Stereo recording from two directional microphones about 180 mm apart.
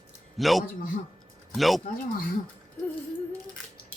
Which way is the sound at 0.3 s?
Centre (ahead or behind).